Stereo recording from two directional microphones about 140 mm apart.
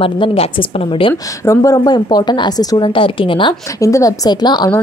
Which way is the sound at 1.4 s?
20° left (ahead or behind).